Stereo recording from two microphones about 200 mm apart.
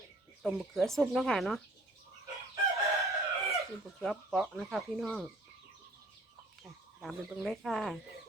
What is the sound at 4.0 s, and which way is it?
Stir, centre (ahead or behind).